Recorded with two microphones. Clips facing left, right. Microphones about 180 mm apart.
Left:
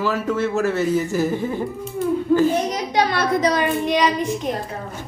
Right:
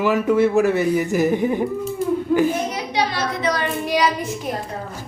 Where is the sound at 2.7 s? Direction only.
50° left (ahead or behind).